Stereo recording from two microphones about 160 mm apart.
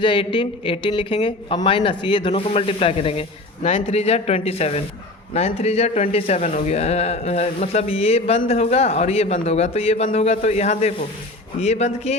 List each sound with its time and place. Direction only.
0.0 s a man's voice: 30° left (ahead or behind)